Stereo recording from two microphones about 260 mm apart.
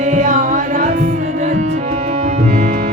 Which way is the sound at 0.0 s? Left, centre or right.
Right.